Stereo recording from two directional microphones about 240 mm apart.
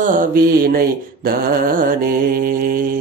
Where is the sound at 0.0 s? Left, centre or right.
Right.